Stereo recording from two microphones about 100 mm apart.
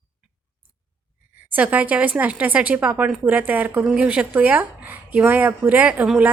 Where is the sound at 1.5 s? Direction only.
15° right (ahead or behind).